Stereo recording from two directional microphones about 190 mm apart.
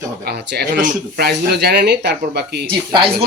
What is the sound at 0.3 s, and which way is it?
Speech, 55° right (ahead or behind).